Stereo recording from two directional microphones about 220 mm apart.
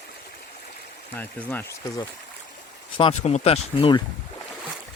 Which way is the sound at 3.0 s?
25° left (ahead or behind).